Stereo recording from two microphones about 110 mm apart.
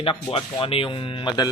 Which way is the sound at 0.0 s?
50° left (ahead or behind).